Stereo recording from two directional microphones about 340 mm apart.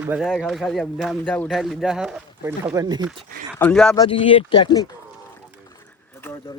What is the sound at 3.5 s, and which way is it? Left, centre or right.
Speech, centre.